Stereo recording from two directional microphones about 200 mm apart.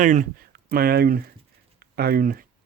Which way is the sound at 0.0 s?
40° right (ahead or behind).